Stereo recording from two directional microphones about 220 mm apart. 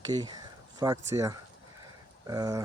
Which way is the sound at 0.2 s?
20° right (ahead or behind).